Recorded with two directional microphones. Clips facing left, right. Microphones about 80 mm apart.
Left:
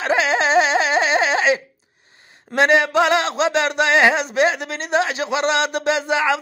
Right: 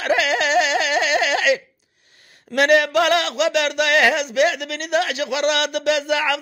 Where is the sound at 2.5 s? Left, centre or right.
Left.